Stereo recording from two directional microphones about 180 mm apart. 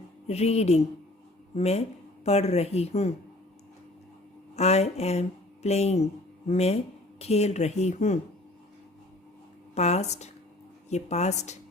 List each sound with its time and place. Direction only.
0.3 s a woman's voice: 35° left (ahead or behind)
4.5 s a woman's voice: 35° left (ahead or behind)
9.7 s a woman's voice: 40° left (ahead or behind)